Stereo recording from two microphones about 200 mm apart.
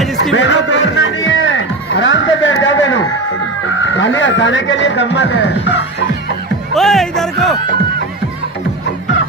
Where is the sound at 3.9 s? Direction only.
70° left (ahead or behind).